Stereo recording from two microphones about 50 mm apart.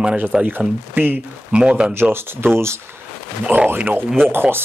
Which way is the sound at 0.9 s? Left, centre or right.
Right.